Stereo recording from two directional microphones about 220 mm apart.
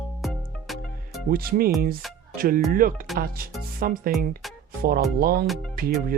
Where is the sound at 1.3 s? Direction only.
40° right (ahead or behind).